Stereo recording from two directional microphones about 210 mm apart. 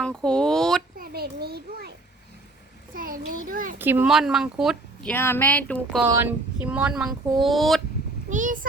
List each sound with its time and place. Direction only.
0.0 s a sound: 5° left (ahead or behind)
0.9 s a child's voice: 45° right (ahead or behind)
2.9 s a child's voice: 40° right (ahead or behind)
3.8 s speech: 10° right (ahead or behind)
5.0 s speech: 10° left (ahead or behind)
6.1 s speech: 10° right (ahead or behind)
8.3 s a sound: 40° right (ahead or behind)